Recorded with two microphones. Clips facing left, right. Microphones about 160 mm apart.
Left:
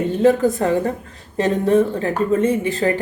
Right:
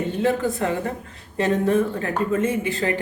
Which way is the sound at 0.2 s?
40° left (ahead or behind).